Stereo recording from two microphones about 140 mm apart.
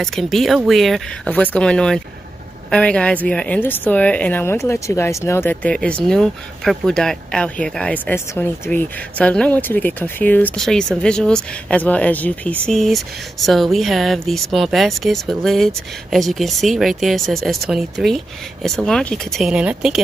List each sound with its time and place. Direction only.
0.0 s a woman's voice: centre (ahead or behind)